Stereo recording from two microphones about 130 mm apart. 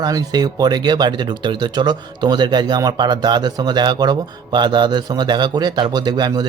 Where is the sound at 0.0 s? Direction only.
30° right (ahead or behind).